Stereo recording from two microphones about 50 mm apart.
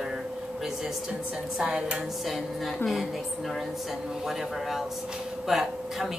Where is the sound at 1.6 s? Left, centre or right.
Centre.